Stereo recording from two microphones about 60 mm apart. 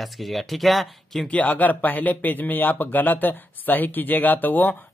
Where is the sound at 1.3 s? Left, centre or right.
Left.